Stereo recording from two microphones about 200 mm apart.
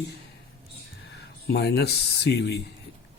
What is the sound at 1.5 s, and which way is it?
Speech, 55° left (ahead or behind).